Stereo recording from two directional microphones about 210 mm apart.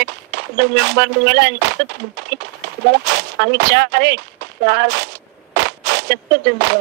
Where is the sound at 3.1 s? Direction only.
55° right (ahead or behind).